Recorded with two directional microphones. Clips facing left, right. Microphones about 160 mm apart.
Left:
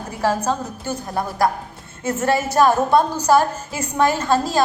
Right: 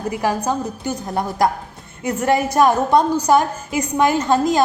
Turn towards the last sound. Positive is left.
turn(degrees=-20)  # may be behind; listen again after turning